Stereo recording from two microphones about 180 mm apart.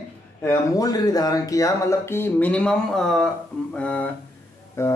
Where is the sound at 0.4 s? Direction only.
15° left (ahead or behind).